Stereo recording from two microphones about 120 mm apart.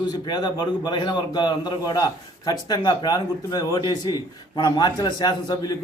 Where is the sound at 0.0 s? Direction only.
35° left (ahead or behind).